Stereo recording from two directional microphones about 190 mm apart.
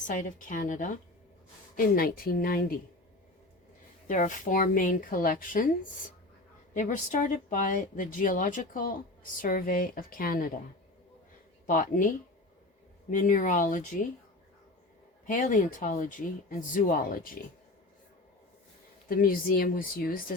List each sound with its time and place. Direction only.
0.1 s speech: 45° left (ahead or behind)
4.0 s speech: 45° left (ahead or behind)
11.6 s speech: 45° left (ahead or behind)
15.3 s speech: 45° left (ahead or behind)
19.0 s speech: 50° left (ahead or behind)